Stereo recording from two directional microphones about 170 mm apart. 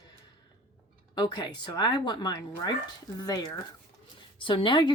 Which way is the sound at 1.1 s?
25° left (ahead or behind).